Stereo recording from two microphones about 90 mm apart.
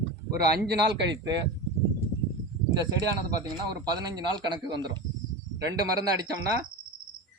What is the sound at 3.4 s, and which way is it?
A man's voice, 50° right (ahead or behind).